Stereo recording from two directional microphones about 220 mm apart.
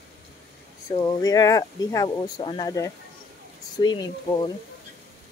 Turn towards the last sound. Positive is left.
turn(degrees=20)  # may be behind; listen again after turning